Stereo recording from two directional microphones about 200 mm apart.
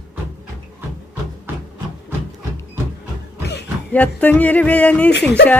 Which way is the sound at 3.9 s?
5° left (ahead or behind).